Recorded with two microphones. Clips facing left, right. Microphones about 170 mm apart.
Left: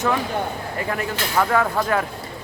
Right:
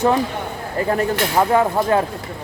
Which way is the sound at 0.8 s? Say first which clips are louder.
Right 8 dB; 35° right (ahead or behind).